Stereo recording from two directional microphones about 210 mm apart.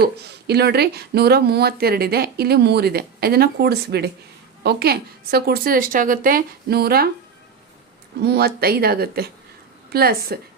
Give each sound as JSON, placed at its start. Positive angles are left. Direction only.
{"t": 0.0, "sound": "speech", "side_deg": -50}
{"t": 8.2, "sound": "speech", "side_deg": -50}